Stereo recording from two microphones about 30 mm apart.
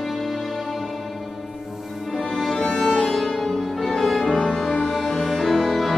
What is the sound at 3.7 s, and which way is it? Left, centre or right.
Music, centre.